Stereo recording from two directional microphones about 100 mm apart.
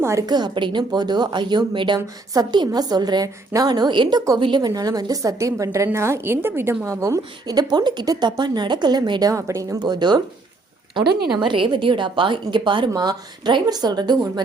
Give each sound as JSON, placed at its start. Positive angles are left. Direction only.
{"t": 0.0, "sound": "a woman's voice", "side_deg": -30}
{"t": 0.3, "sound": "a woman's voice", "side_deg": -45}
{"t": 2.3, "sound": "a woman's voice", "side_deg": -40}
{"t": 4.7, "sound": "a woman's voice", "side_deg": -40}
{"t": 9.3, "sound": "a woman's voice", "side_deg": -30}
{"t": 9.8, "sound": "a woman's voice", "side_deg": -45}